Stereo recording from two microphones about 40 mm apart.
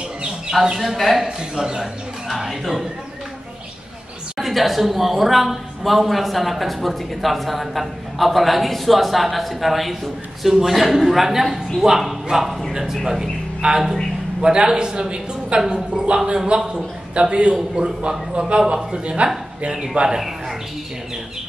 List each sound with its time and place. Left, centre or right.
0.5 s a woman's voice: centre
1.2 s speech: centre
2.2 s a woman's voice: centre
4.4 s a woman's voice: centre
13.6 s a man's voice: right
19.7 s speech: centre
20.2 s a woman's voice: centre